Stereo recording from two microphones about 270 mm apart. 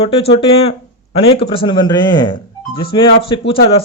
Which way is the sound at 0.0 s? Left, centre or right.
Left.